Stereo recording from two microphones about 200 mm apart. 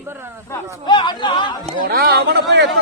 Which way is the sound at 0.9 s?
25° left (ahead or behind).